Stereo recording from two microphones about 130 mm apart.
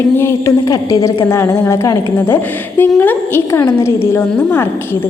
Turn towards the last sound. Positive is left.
turn(degrees=20)  # may be behind; listen again after turning